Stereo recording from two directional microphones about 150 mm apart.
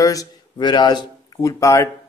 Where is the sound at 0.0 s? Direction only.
25° left (ahead or behind).